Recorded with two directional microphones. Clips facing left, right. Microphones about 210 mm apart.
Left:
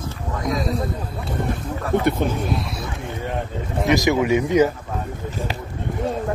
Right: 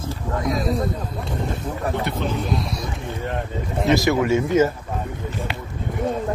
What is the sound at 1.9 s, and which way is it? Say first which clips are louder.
Speech: left 10 dB; 50° left (ahead or behind).